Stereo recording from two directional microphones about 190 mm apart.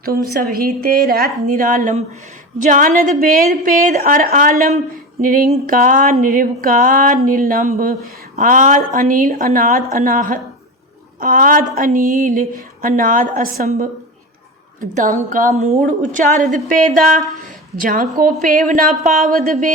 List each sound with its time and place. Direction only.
0.5 s speech: 50° right (ahead or behind)
14.8 s speech: 45° right (ahead or behind)